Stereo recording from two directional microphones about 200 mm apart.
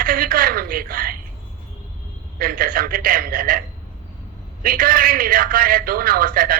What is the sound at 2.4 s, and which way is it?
A man's voice, 45° right (ahead or behind).